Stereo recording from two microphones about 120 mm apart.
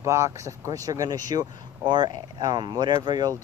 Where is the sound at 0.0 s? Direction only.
25° right (ahead or behind).